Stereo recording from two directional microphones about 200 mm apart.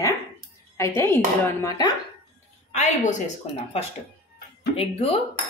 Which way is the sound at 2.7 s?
35° left (ahead or behind).